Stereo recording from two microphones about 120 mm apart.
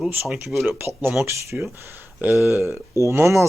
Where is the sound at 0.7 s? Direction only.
20° right (ahead or behind).